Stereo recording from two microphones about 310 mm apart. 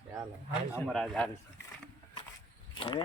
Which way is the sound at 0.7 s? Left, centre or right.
Centre.